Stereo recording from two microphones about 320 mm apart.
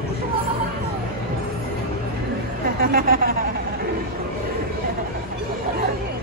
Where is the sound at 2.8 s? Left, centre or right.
Right.